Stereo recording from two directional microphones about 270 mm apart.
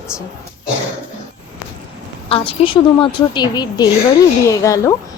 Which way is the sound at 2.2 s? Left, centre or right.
Centre.